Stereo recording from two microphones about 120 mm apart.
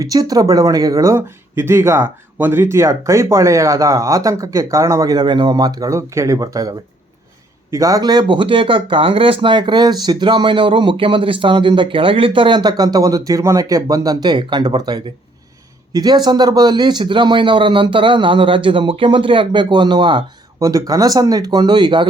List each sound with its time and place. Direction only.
0.0 s speech: 30° right (ahead or behind)